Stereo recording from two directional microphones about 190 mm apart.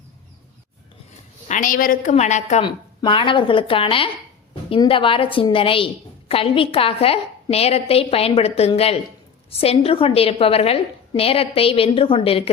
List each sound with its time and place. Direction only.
1.5 s a woman's voice: 45° left (ahead or behind)
2.6 s a woman's voice: 25° left (ahead or behind)